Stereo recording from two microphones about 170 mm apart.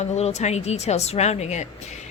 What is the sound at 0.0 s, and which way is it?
A woman's voice, 40° left (ahead or behind).